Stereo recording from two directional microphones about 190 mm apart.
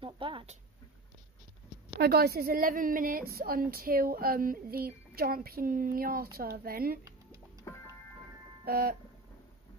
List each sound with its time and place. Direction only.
0.0 s a sound: 25° right (ahead or behind)
2.0 s a woman's voice: 55° right (ahead or behind)
7.1 s music: 15° right (ahead or behind)
7.6 s music: 15° left (ahead or behind)
8.6 s music: 55° right (ahead or behind)